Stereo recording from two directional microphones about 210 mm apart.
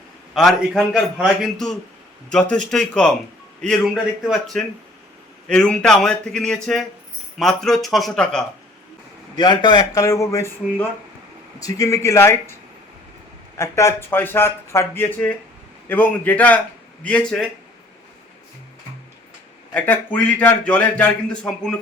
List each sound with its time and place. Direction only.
0.3 s a man's voice: centre (ahead or behind)
9.3 s a man's voice: 20° left (ahead or behind)
13.6 s a man's voice: 15° left (ahead or behind)
19.7 s a man's voice: 10° left (ahead or behind)